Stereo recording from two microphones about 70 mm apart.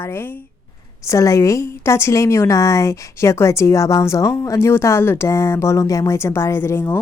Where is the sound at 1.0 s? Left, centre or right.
Left.